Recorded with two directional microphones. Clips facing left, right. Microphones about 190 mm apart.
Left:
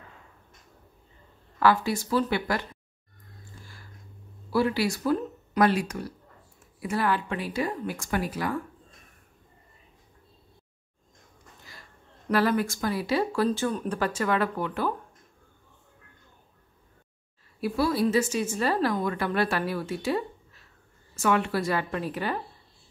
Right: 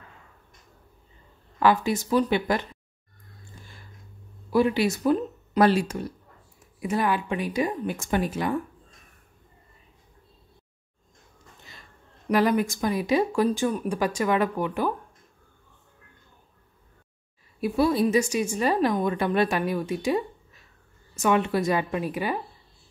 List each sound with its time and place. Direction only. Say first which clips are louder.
1.6 s speech: right 1 dB; 20° right (ahead or behind)
4.5 s speech: right 3 dB; 20° right (ahead or behind)
12.3 s a woman's voice: right 2 dB; 15° right (ahead or behind)
17.6 s a woman's voice: right 3 dB; 20° right (ahead or behind)